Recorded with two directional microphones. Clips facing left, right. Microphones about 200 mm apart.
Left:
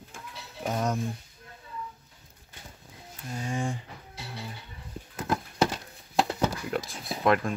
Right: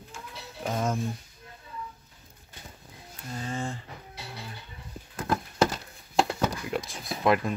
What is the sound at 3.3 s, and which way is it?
Speech, 15° left (ahead or behind).